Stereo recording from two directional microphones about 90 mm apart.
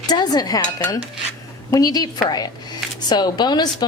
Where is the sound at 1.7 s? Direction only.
45° left (ahead or behind).